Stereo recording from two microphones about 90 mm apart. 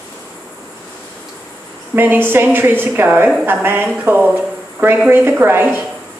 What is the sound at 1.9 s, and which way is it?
A woman's voice, 25° right (ahead or behind).